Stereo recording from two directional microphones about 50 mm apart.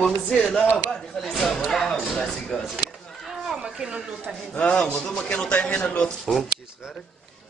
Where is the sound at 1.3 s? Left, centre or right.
Centre.